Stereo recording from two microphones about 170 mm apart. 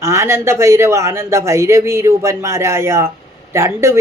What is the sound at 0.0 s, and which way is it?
Speech, 15° right (ahead or behind).